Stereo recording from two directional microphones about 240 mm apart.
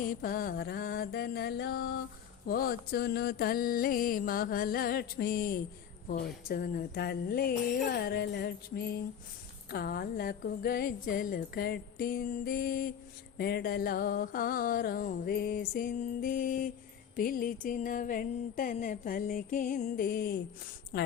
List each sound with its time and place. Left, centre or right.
0.1 s speech: left